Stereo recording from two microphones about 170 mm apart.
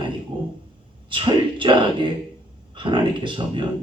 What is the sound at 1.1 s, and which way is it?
Speech, 30° right (ahead or behind).